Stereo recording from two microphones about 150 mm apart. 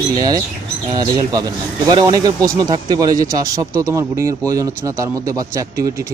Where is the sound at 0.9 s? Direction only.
25° right (ahead or behind).